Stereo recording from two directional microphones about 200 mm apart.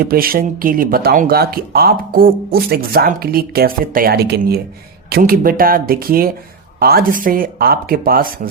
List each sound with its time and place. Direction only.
0.0 s speech: 45° right (ahead or behind)